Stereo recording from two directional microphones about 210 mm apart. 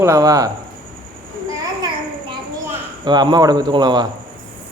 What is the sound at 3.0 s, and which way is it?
Speech, 20° right (ahead or behind).